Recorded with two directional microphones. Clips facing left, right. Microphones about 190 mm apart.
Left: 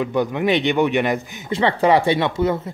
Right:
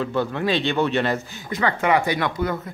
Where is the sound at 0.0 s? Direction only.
15° left (ahead or behind).